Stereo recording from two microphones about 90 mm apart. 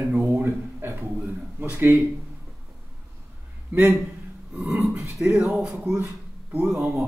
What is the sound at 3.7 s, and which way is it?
Speech, 20° right (ahead or behind).